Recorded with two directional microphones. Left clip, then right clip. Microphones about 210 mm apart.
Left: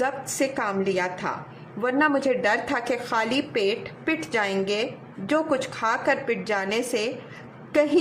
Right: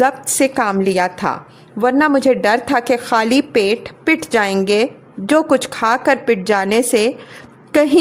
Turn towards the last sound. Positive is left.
turn(degrees=-40)  # may be behind; listen again after turning